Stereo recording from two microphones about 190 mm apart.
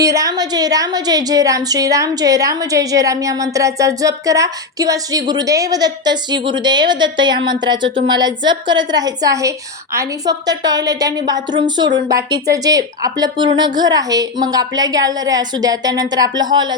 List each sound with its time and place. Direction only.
0.0 s a woman's voice: 20° right (ahead or behind)